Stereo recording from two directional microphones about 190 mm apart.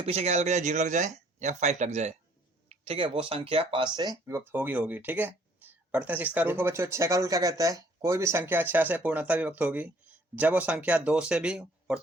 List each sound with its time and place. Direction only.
0.0 s speech: 35° right (ahead or behind)
4.3 s speech: 10° right (ahead or behind)